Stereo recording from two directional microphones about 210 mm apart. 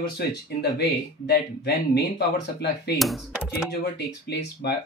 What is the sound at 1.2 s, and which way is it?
Speech, 50° left (ahead or behind).